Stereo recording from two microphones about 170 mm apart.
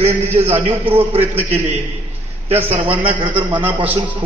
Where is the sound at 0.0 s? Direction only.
35° right (ahead or behind).